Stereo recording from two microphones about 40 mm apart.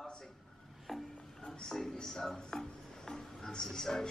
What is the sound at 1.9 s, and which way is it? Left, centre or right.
Music, centre.